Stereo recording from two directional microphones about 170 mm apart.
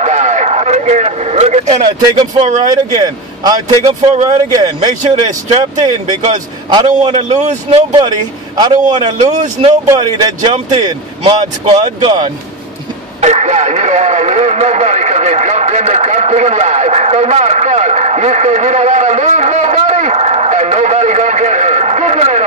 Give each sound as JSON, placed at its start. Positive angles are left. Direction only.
{"t": 0.0, "sound": "vehicle", "side_deg": -45}
{"t": 2.7, "sound": "a man's voice", "side_deg": -25}
{"t": 3.6, "sound": "speech", "side_deg": -40}
{"t": 5.5, "sound": "speech", "side_deg": -35}
{"t": 7.2, "sound": "speech", "side_deg": -45}
{"t": 8.5, "sound": "speech", "side_deg": -25}
{"t": 9.2, "sound": "speech", "side_deg": -45}
{"t": 9.8, "sound": "speech", "side_deg": -20}
{"t": 13.2, "sound": "speech", "side_deg": -40}